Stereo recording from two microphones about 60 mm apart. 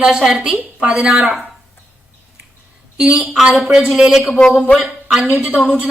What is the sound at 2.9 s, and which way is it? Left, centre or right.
A woman's voice, centre.